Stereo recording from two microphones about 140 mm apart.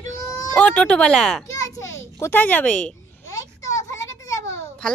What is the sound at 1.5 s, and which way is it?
Children playing, 25° left (ahead or behind).